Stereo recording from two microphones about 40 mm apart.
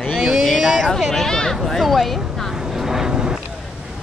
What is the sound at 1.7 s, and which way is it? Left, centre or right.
Speech, centre.